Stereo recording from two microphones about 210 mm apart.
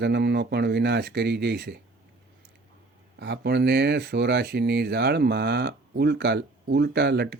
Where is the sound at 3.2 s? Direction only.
55° right (ahead or behind).